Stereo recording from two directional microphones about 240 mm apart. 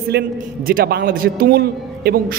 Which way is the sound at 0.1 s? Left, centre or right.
Right.